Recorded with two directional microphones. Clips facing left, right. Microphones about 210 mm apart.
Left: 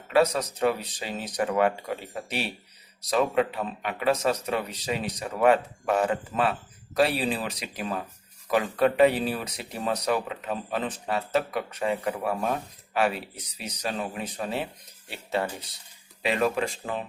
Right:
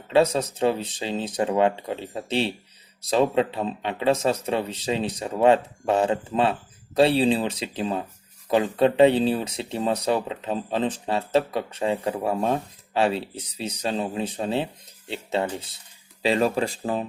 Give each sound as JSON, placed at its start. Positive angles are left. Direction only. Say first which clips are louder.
{"t": 0.1, "sound": "speech", "louder": "right 3 dB", "side_deg": -25}